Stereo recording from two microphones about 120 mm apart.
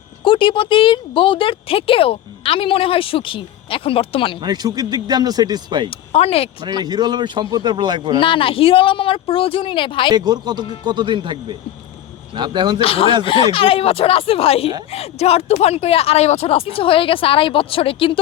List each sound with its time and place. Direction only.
0.3 s speech: 45° left (ahead or behind)
4.4 s speech: 35° right (ahead or behind)
5.9 s speech: 50° left (ahead or behind)
6.8 s speech: 35° right (ahead or behind)
8.2 s speech: 45° left (ahead or behind)
10.1 s speech: 35° right (ahead or behind)
12.8 s speech: 50° left (ahead or behind)